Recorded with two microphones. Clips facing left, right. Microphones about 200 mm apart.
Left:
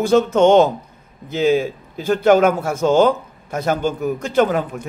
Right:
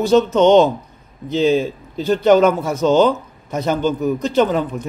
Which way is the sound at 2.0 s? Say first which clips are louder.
Right 1 dB; 50° left (ahead or behind).